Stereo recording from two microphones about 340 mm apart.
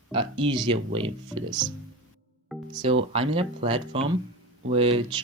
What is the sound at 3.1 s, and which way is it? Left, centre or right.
Speech, centre.